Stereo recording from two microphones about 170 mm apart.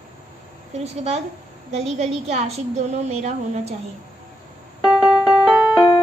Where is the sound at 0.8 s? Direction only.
40° right (ahead or behind).